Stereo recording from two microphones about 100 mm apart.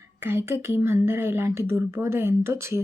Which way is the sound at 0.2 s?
25° right (ahead or behind).